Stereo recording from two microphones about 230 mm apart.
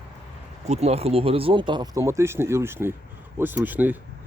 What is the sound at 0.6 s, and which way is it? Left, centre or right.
Speech, right.